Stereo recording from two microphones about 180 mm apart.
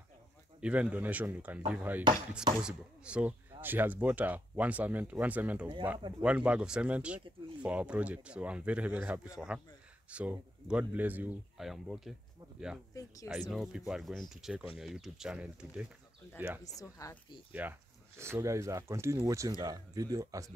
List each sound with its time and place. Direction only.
0.6 s speech: 5° right (ahead or behind)
12.9 s speech: 20° left (ahead or behind)
13.3 s speech: centre (ahead or behind)
17.0 s speech: 20° left (ahead or behind)
17.5 s speech: 10° right (ahead or behind)